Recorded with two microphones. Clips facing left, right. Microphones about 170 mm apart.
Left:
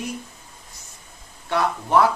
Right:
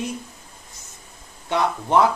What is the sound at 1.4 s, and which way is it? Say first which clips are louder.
Speech: right 1 dB; 20° right (ahead or behind).